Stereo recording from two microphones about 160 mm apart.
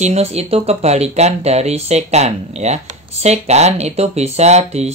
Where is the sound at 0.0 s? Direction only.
40° right (ahead or behind).